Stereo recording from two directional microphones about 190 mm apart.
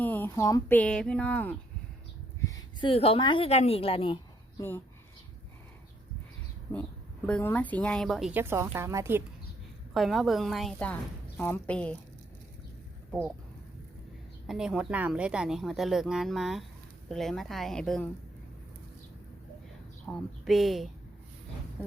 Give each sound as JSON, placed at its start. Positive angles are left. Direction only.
{"t": 0.0, "sound": "a woman's voice", "side_deg": 10}
{"t": 0.8, "sound": "speech", "side_deg": 5}
{"t": 2.5, "sound": "a sound", "side_deg": 20}
{"t": 2.9, "sound": "a woman's voice", "side_deg": 30}
{"t": 6.7, "sound": "a woman's voice", "side_deg": 10}
{"t": 9.9, "sound": "a woman's voice", "side_deg": 0}
{"t": 13.1, "sound": "speech", "side_deg": 5}
{"t": 14.4, "sound": "a woman's voice", "side_deg": 0}
{"t": 20.1, "sound": "a woman's voice", "side_deg": 0}